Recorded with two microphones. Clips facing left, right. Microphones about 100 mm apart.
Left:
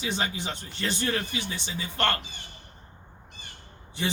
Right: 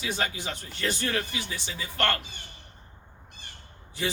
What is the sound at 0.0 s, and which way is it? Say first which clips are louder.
A man's voice: left 1 dB; 25° left (ahead or behind).